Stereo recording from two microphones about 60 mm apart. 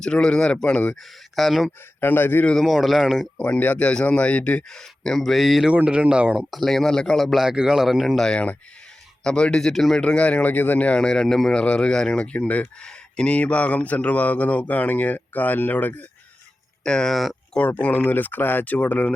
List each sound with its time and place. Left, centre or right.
0.0 s speech: centre
1.4 s speech: centre
2.0 s speech: left
2.6 s speech: centre
3.3 s speech: left
4.7 s speech: centre
5.6 s speech: right
6.5 s speech: centre
7.3 s speech: centre
8.2 s speech: centre
10.0 s speech: centre
11.6 s speech: centre
16.8 s speech: centre
17.8 s speech: left